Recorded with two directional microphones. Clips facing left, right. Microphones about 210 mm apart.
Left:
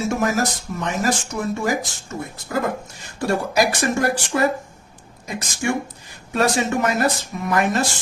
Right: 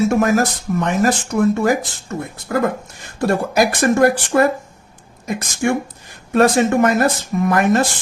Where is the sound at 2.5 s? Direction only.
50° right (ahead or behind).